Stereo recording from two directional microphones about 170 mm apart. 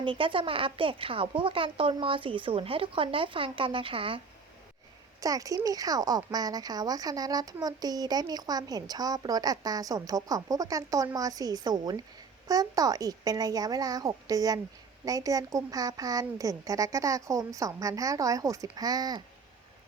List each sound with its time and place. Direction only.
0.0 s a woman's voice: 30° right (ahead or behind)
5.2 s speech: 20° right (ahead or behind)